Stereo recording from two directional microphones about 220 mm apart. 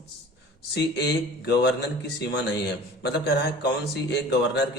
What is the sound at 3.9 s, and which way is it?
Speech, 50° left (ahead or behind).